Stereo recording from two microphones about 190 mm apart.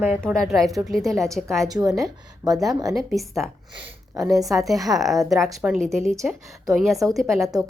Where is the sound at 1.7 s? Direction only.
20° right (ahead or behind).